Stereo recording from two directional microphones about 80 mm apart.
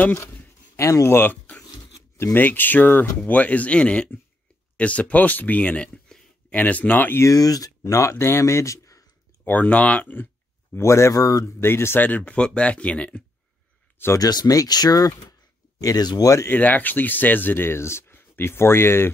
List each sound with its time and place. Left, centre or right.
0.7 s speech: left
7.2 s speech: left
9.4 s speech: left
10.7 s speech: left
11.6 s speech: left
14.1 s speech: left
16.4 s speech: left